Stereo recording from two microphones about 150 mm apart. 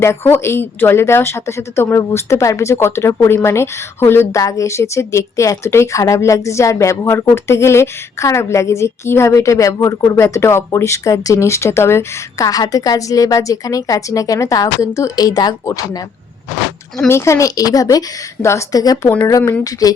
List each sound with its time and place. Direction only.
0.0 s a woman's voice: 15° left (ahead or behind)
17.1 s a woman's voice: 20° left (ahead or behind)